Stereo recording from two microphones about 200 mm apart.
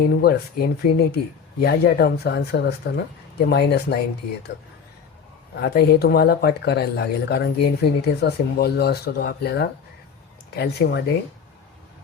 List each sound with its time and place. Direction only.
0.0 s speech: 50° left (ahead or behind)
5.5 s speech: 55° left (ahead or behind)